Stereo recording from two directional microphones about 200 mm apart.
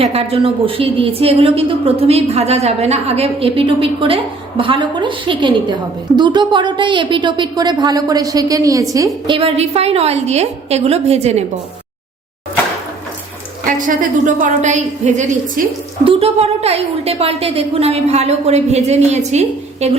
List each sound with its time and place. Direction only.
0.0 s a woman's voice: 30° right (ahead or behind)
13.7 s a woman's voice: 40° right (ahead or behind)